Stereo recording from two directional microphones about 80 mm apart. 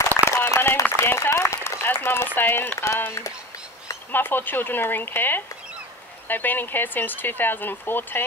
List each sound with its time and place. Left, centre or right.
0.2 s a sound: left
2.0 s speech: left
3.1 s speech: left
4.1 s speech: left